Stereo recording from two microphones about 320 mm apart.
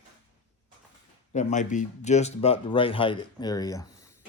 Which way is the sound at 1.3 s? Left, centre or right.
Left.